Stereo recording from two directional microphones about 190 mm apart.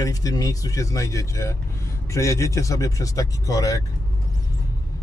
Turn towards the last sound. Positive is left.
turn(degrees=20)  # may be behind; listen again after turning